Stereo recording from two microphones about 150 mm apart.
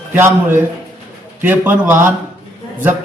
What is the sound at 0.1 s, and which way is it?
A man's voice, 15° right (ahead or behind).